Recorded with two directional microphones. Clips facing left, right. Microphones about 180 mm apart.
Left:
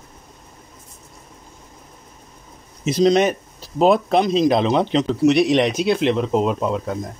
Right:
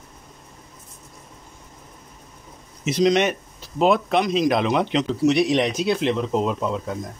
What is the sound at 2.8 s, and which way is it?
Speech, 35° left (ahead or behind).